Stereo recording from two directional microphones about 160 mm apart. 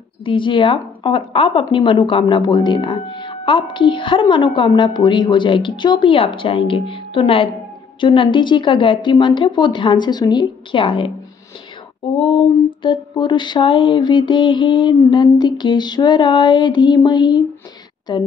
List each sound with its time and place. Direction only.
0.2 s a woman's voice: 30° left (ahead or behind)
12.2 s a woman's voice: 35° left (ahead or behind)
13.2 s mantra: 30° left (ahead or behind)